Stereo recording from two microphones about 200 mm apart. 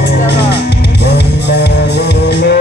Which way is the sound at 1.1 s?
55° left (ahead or behind).